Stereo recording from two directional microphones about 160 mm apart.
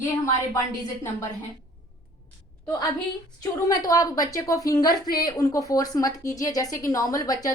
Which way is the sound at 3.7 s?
25° left (ahead or behind).